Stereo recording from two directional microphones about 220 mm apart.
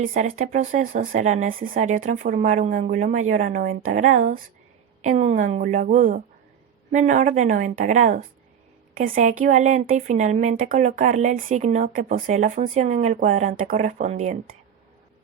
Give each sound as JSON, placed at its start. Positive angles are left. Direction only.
{"t": 0.0, "sound": "a woman's voice", "side_deg": -35}